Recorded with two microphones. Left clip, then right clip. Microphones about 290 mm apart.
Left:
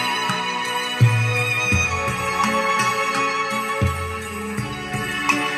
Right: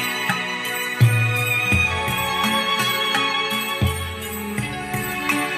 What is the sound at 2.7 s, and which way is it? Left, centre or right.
Music, centre.